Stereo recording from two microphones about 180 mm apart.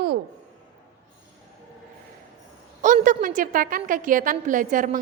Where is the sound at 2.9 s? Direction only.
45° right (ahead or behind).